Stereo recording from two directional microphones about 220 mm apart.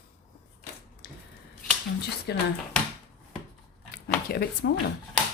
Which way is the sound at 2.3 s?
45° left (ahead or behind).